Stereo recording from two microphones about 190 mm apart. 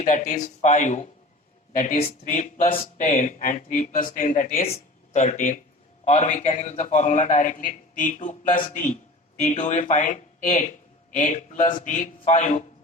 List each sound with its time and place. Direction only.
0.0 s speech: 40° left (ahead or behind)